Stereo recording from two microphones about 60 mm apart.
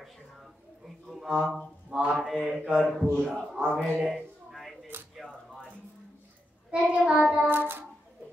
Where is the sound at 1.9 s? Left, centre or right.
Centre.